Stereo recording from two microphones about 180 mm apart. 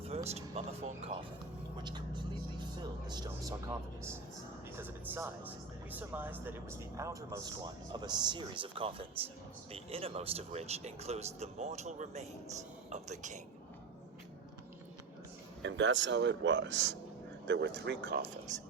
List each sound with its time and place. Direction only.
0.3 s speech: 35° right (ahead or behind)
1.8 s a man's voice: 25° right (ahead or behind); by 13.4 s 40° right (ahead or behind)
15.6 s speech: 80° right
17.4 s speech: 80° right
18.2 s speech: 40° right (ahead or behind)